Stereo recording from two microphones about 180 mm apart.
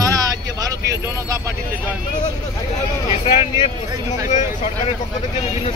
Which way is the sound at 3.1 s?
35° left (ahead or behind).